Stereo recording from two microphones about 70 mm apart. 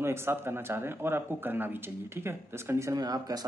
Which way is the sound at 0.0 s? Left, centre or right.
Right.